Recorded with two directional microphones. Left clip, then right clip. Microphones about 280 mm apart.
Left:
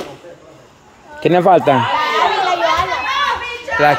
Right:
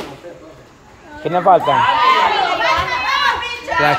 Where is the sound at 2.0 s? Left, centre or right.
Centre.